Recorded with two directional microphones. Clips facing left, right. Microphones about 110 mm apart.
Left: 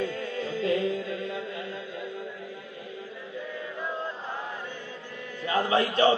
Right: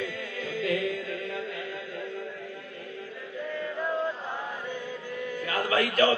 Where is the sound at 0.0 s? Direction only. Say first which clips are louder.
Left 4 dB; 30° left (ahead or behind).